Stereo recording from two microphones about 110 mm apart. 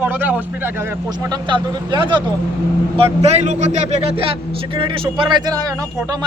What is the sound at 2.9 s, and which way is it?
A man's voice, 65° right (ahead or behind).